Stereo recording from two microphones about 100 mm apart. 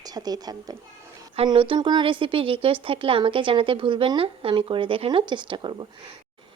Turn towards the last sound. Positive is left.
turn(degrees=-50)  # may be behind; listen again after turning